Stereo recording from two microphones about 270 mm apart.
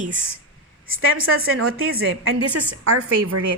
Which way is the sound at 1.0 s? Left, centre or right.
Right.